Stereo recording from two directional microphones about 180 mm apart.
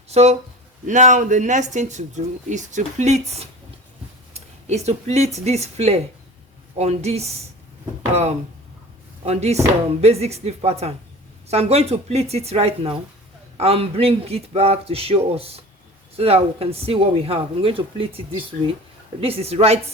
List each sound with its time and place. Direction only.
0.1 s speech: 35° right (ahead or behind)
9.2 s speech: 35° right (ahead or behind)